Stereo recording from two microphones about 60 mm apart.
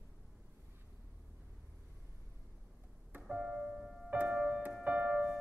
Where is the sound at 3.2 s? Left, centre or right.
Centre.